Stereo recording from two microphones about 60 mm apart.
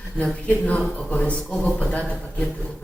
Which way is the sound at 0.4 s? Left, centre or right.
Left.